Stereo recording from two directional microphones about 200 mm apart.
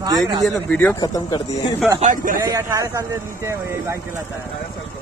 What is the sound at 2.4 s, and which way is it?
Speech, 15° right (ahead or behind).